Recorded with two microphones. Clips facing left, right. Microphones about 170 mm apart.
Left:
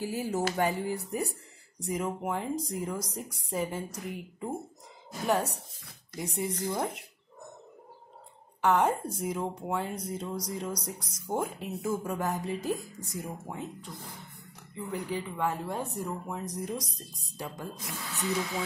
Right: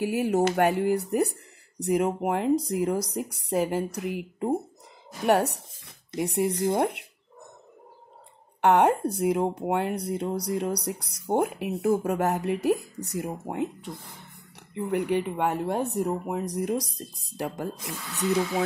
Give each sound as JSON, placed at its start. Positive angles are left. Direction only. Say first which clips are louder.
{"t": 0.0, "sound": "speech", "louder": "right 7 dB", "side_deg": -65}
{"t": 8.5, "sound": "speech", "louder": "right 5 dB", "side_deg": -65}